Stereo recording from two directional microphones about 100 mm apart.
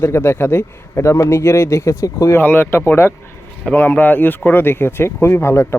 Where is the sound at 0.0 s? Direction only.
25° left (ahead or behind).